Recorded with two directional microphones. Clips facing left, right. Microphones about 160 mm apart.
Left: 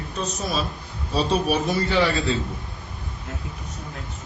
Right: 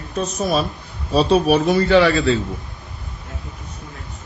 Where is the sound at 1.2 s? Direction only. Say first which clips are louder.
Right 7 dB; 70° right (ahead or behind).